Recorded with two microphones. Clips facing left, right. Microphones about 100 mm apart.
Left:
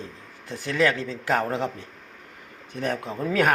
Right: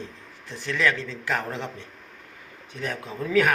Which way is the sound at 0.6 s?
50° left (ahead or behind).